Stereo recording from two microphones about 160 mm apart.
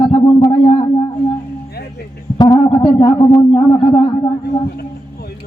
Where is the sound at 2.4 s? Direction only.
30° left (ahead or behind).